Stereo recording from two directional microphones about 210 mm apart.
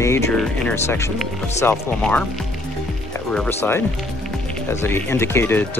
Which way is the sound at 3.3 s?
5° left (ahead or behind).